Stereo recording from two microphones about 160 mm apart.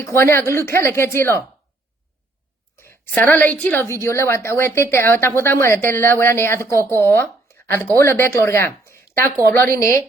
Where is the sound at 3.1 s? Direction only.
10° left (ahead or behind).